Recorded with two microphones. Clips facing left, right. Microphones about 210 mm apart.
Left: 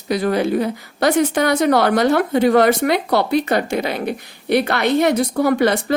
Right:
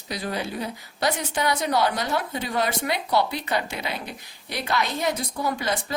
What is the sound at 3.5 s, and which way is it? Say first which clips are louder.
A woman's voice: left 9 dB; 45° left (ahead or behind).